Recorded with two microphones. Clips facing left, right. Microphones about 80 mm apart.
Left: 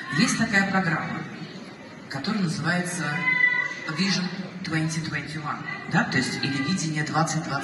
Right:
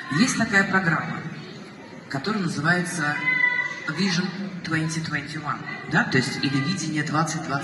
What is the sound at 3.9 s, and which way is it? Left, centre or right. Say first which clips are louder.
A man's voice: right 2 dB; right.